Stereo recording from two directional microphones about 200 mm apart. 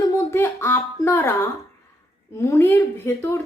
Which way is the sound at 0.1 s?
15° left (ahead or behind).